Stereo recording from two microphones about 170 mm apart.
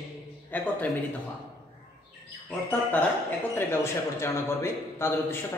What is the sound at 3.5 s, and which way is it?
A man's voice, 15° left (ahead or behind).